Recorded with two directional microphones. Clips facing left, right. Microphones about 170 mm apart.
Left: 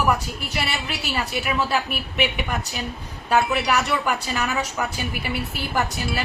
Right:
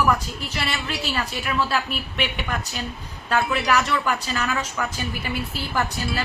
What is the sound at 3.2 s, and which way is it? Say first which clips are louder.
A woman's voice: left 2 dB; 10° left (ahead or behind).